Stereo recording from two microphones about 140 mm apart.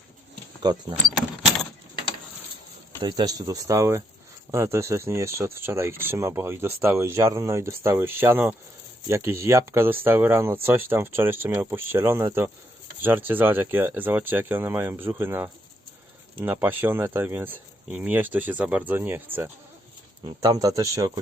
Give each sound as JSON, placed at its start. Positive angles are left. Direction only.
{"t": 0.6, "sound": "speech", "side_deg": -30}
{"t": 3.0, "sound": "speech", "side_deg": -30}
{"t": 20.2, "sound": "speech", "side_deg": -25}